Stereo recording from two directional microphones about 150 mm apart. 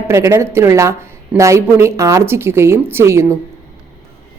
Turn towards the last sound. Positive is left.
turn(degrees=-15)  # may be behind; listen again after turning